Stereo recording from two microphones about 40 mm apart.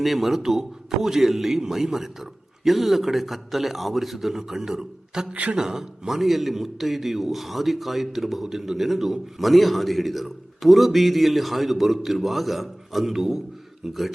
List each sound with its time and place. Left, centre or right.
0.0 s a man's voice: centre
5.3 s a man's voice: right
5.5 s a man's voice: centre